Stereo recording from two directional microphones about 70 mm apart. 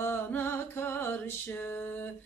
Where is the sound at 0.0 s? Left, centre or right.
Left.